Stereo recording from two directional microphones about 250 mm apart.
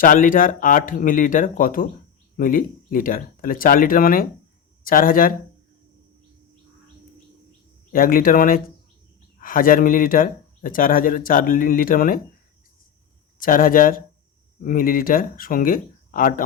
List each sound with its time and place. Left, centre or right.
0.0 s speech: left
7.9 s speech: left
13.4 s speech: left